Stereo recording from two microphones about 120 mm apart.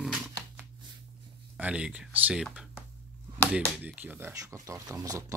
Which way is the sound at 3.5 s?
10° right (ahead or behind).